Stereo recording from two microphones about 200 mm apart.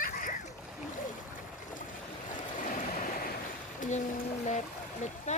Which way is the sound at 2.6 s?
45° left (ahead or behind).